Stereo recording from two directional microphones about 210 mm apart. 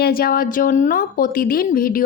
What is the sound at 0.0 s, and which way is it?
A woman's voice, 45° left (ahead or behind).